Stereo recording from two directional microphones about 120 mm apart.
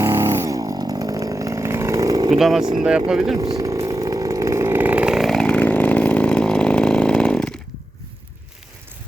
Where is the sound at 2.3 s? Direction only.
5° right (ahead or behind).